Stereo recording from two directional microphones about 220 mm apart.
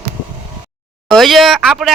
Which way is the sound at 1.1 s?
Centre (ahead or behind).